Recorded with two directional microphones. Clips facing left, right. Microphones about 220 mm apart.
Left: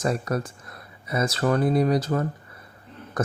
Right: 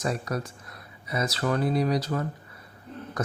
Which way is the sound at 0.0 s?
50° left (ahead or behind).